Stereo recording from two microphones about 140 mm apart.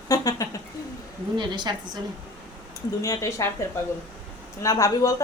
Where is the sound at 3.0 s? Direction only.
20° left (ahead or behind).